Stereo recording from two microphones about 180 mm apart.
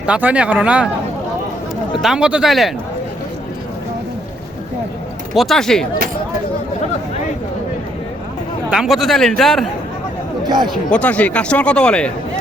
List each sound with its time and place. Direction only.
0.0 s speech: 5° right (ahead or behind)
2.0 s speech: 5° right (ahead or behind)
5.3 s speech: centre (ahead or behind)
8.7 s speech: centre (ahead or behind)
10.4 s speech: 25° right (ahead or behind)
10.9 s speech: 5° left (ahead or behind)